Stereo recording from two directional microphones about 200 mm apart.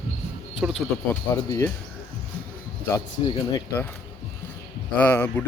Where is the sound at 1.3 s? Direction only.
10° left (ahead or behind).